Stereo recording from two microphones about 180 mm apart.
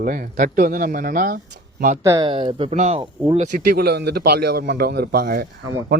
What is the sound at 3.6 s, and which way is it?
A man's voice, 60° right (ahead or behind).